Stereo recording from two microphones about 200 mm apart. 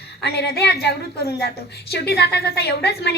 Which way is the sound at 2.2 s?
55° left (ahead or behind).